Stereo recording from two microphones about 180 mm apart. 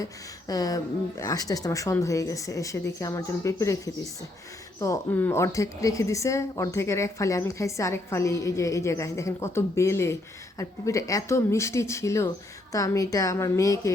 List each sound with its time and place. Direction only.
0.0 s a woman's voice: 20° left (ahead or behind)
4.8 s a woman's voice: 15° left (ahead or behind)